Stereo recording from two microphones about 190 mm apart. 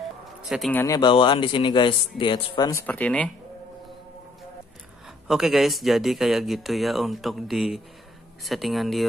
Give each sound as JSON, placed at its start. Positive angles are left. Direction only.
{"t": 0.5, "sound": "speech", "side_deg": 0}
{"t": 0.7, "sound": "speech", "side_deg": 20}
{"t": 2.7, "sound": "speech", "side_deg": 10}
{"t": 5.3, "sound": "speech", "side_deg": 0}